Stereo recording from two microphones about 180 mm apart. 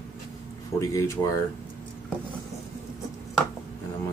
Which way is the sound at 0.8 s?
15° left (ahead or behind).